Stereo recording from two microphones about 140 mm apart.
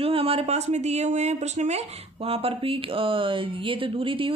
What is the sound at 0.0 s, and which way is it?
Speech, 45° right (ahead or behind).